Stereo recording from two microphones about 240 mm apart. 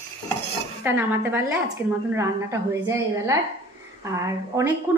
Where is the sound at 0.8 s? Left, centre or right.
Centre.